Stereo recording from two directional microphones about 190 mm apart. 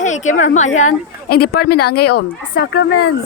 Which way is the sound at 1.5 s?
55° left (ahead or behind).